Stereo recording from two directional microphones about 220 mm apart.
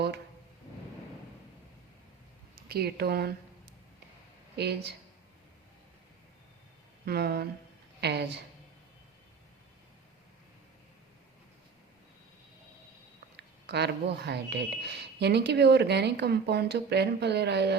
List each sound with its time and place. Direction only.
2.6 s speech: 45° right (ahead or behind)
4.5 s speech: 50° right (ahead or behind)
7.0 s speech: 45° right (ahead or behind)
13.3 s speech: 50° right (ahead or behind)